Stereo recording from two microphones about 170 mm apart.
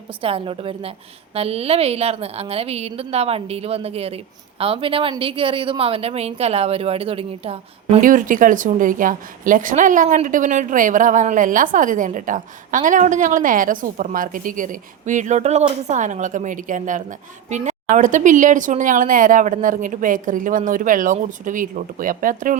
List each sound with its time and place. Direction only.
0.2 s a woman's voice: 35° right (ahead or behind)
8.0 s a woman's voice: 50° right (ahead or behind)